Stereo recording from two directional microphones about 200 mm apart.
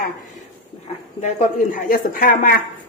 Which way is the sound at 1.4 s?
45° left (ahead or behind).